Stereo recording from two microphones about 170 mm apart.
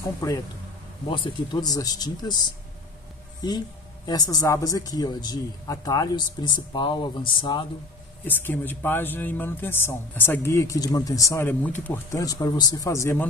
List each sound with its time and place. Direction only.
0.2 s speech: 20° left (ahead or behind)
8.3 s speech: 10° left (ahead or behind)